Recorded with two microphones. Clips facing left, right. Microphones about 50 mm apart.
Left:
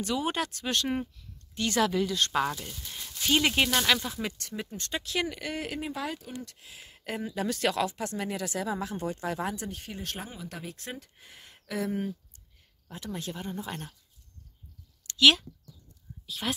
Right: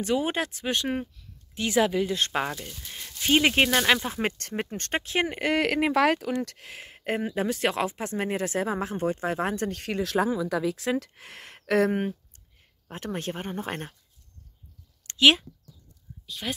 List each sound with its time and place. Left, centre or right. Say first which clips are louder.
0.0 s speech: right 4 dB; right
2.0 s speech: right 1 dB; right
4.1 s speech: right 6 dB; right
5.0 s speech: right 3 dB; right
5.4 s speech: right 10 dB; right
7.0 s speech: right 6 dB; right
7.4 s speech: left 1 dB; right
9.7 s speech: right 9 dB; right
12.8 s speech: right 5 dB; right
15.0 s a sound: right 2 dB; right
16.3 s speech: even; centre